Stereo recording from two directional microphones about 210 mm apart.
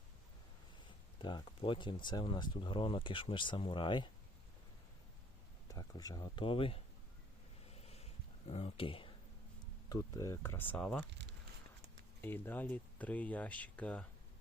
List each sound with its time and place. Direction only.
0.9 s speech: 20° left (ahead or behind)
5.6 s speech: 15° left (ahead or behind)
7.7 s a sound: 30° left (ahead or behind)
9.9 s speech: 15° left (ahead or behind)
12.2 s speech: 10° left (ahead or behind)